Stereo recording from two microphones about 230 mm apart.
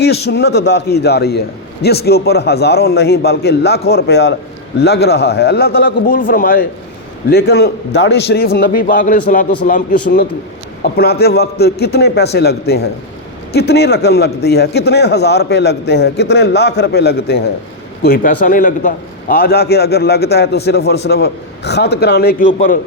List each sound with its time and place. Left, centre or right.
0.0 s a man's voice: left